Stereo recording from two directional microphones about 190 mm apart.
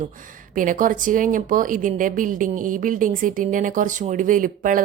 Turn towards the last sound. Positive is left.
turn(degrees=-45)  # may be behind; listen again after turning